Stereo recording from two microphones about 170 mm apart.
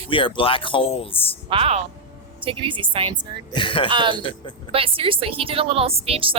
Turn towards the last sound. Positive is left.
turn(degrees=-35)  # may be behind; listen again after turning